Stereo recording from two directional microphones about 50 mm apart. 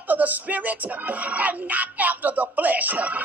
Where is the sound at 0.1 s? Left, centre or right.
Right.